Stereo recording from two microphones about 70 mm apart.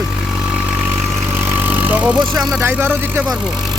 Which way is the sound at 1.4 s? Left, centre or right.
Right.